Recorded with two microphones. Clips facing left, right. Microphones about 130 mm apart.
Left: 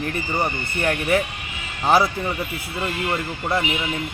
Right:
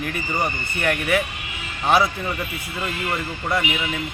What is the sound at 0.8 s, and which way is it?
Speech, 25° left (ahead or behind).